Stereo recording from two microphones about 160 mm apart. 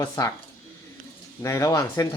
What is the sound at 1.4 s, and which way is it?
Speech, 20° left (ahead or behind).